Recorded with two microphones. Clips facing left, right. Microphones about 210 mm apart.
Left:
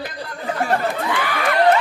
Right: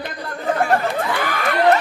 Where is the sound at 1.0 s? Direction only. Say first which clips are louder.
Right 1 dB; 45° right (ahead or behind).